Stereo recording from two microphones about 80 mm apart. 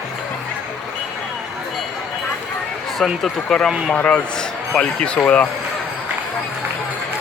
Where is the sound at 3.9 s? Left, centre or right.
Centre.